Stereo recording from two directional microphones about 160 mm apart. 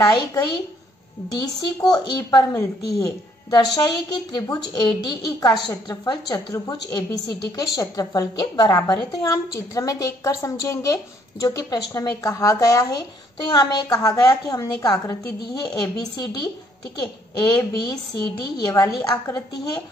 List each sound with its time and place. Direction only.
0.0 s a woman's voice: 20° left (ahead or behind)